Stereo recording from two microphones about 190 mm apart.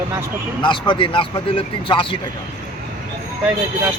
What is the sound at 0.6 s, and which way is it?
A man's voice, 25° left (ahead or behind).